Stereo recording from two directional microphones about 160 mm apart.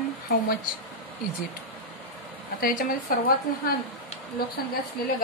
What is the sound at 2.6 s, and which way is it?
Speech, 65° left (ahead or behind).